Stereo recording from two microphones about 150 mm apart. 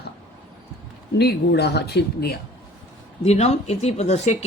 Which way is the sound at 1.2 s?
90° left.